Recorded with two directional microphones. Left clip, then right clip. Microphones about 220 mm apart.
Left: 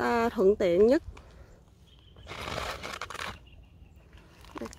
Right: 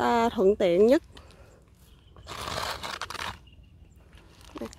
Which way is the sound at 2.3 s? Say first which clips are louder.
Right 3 dB; 40° right (ahead or behind).